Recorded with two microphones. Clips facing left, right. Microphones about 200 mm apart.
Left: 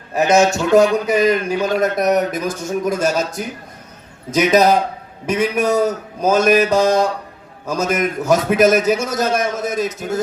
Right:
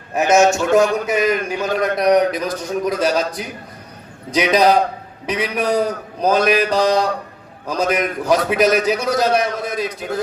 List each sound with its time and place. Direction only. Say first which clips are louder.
0.2 s a man's voice: even; 40° left (ahead or behind)